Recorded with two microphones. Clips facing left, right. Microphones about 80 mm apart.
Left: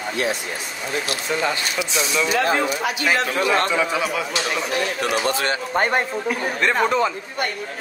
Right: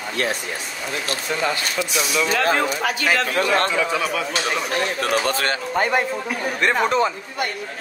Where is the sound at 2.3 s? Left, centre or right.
Right.